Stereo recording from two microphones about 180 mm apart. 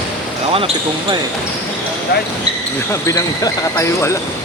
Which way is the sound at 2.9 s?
15° left (ahead or behind).